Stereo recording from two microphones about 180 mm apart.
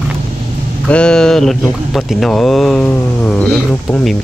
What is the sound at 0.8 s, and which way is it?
Speech, 5° left (ahead or behind).